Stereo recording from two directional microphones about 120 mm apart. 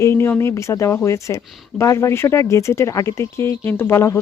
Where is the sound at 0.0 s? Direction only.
20° left (ahead or behind).